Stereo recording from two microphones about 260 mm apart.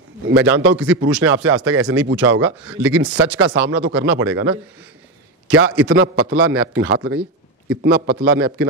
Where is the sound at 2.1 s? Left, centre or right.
Right.